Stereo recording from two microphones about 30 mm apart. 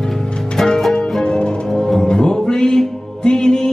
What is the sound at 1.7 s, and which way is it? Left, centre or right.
Music, centre.